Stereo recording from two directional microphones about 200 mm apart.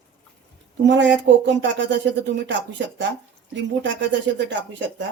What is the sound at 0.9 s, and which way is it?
Speech, 60° right (ahead or behind).